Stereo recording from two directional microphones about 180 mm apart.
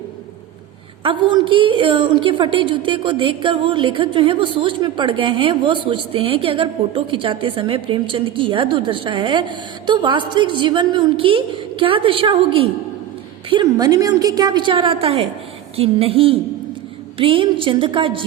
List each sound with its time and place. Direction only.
1.0 s a woman's voice: 25° right (ahead or behind)